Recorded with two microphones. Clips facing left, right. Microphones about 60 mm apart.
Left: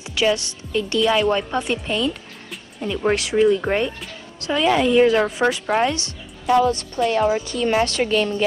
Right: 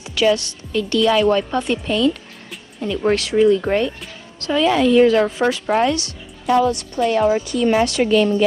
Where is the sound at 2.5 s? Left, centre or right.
Centre.